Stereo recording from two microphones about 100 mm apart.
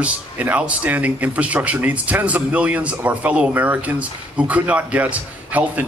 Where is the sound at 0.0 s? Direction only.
15° right (ahead or behind).